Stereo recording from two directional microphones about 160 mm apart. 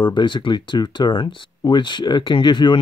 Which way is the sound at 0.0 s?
30° left (ahead or behind).